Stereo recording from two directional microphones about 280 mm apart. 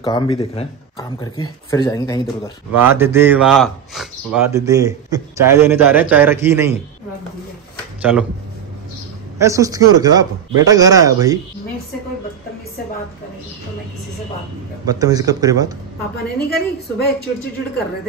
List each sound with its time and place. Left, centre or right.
0.0 s speech: centre
2.7 s a man's voice: centre
8.0 s speech: centre
9.4 s a man's voice: centre
14.9 s a man's voice: centre
16.3 s a woman's voice: left